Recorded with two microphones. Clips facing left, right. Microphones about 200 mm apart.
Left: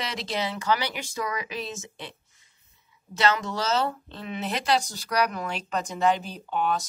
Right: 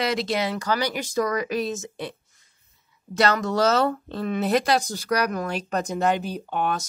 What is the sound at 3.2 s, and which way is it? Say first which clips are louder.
Speech: right 5 dB; 40° right (ahead or behind).